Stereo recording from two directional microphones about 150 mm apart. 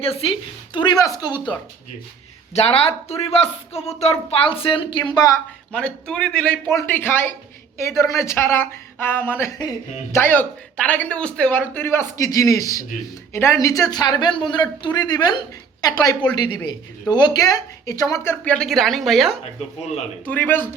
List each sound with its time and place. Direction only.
0.0 s a woman's voice: 40° left (ahead or behind)
2.6 s a woman's voice: 40° left (ahead or behind)
5.7 s a woman's voice: 5° left (ahead or behind); by 15.3 s 25° left (ahead or behind)
16.6 s speech: 30° left (ahead or behind); by 19.4 s centre (ahead or behind)
20.2 s speech: 10° left (ahead or behind)